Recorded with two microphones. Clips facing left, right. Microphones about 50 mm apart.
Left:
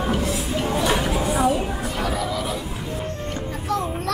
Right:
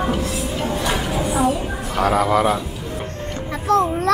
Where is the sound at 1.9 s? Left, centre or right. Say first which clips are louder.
Right 11 dB; right.